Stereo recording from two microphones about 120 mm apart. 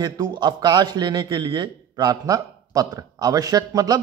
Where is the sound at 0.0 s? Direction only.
35° right (ahead or behind).